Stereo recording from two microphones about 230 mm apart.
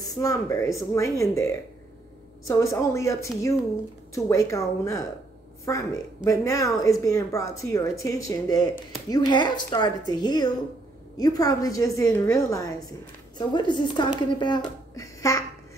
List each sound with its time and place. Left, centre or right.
0.0 s a woman's voice: centre